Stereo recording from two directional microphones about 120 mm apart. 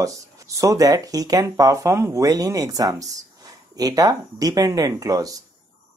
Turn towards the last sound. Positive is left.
turn(degrees=-30)  # may be behind; listen again after turning